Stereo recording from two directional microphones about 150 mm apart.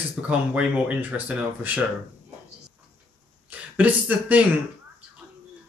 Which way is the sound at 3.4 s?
10° right (ahead or behind).